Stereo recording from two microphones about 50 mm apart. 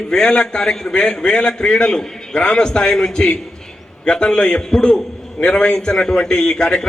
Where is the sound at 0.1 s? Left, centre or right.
Centre.